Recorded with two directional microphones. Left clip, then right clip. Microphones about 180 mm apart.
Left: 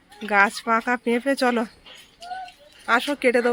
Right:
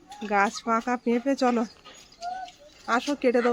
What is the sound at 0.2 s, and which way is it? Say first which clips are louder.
Speech: left 5 dB; 5° left (ahead or behind).